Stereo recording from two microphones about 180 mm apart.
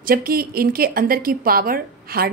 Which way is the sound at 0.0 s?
55° right (ahead or behind).